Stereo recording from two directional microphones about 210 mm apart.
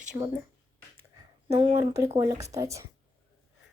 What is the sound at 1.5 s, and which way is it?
A woman's voice, 25° right (ahead or behind).